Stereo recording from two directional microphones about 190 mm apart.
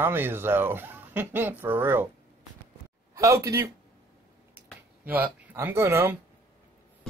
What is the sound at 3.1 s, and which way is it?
Speech, 15° right (ahead or behind).